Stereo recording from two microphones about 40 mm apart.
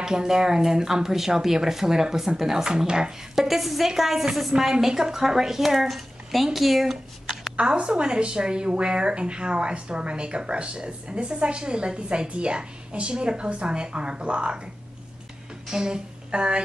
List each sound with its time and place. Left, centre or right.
0.0 s speech: centre
3.3 s speech: centre
7.5 s a woman's voice: right
15.7 s speech: centre